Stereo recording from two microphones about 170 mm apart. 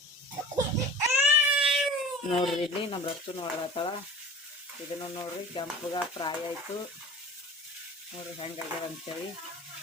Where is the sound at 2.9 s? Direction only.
30° left (ahead or behind).